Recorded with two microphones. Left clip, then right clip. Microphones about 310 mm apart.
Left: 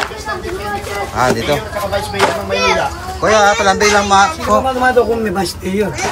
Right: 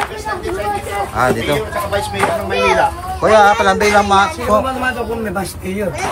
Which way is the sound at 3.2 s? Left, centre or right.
Centre.